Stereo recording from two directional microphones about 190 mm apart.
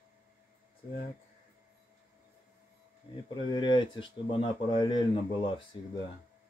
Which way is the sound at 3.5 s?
25° left (ahead or behind).